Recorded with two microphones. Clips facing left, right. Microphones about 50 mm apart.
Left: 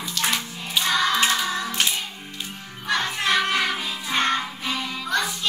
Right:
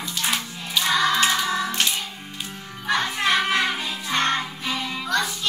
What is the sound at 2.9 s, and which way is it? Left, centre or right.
Music, centre.